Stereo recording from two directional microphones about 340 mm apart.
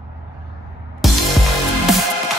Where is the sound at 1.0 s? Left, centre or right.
Centre.